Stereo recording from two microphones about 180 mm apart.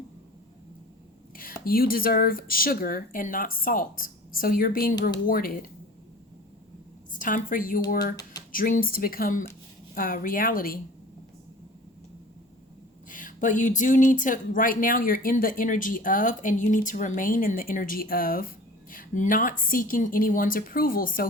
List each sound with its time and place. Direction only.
1.4 s speech: 55° left (ahead or behind)
7.1 s a woman's voice: 45° left (ahead or behind)
7.9 s speech: 60° left (ahead or behind)
8.1 s a sound: 20° left (ahead or behind)
8.5 s speech: 50° left (ahead or behind)
13.1 s speech: 50° left (ahead or behind)